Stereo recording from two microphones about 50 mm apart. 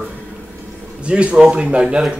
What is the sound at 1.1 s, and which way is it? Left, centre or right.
Speech, right.